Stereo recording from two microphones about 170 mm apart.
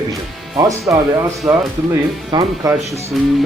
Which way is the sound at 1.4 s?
10° right (ahead or behind).